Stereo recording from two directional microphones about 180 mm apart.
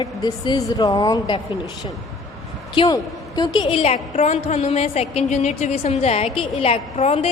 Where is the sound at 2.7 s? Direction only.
25° left (ahead or behind).